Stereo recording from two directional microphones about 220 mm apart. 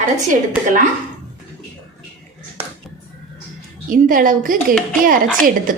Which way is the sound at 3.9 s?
40° right (ahead or behind).